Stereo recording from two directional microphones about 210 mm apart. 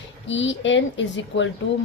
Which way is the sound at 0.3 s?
60° left (ahead or behind).